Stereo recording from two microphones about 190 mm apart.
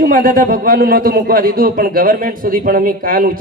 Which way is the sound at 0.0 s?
50° right (ahead or behind).